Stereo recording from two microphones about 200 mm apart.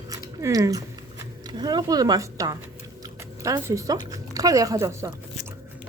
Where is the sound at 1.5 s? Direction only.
20° right (ahead or behind).